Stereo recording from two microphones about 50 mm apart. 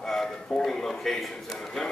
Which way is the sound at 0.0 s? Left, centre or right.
Centre.